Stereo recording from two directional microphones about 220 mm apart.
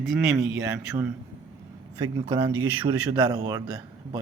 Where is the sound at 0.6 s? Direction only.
10° right (ahead or behind).